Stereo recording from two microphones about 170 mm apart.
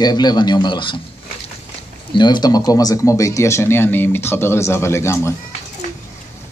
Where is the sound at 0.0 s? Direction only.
25° left (ahead or behind).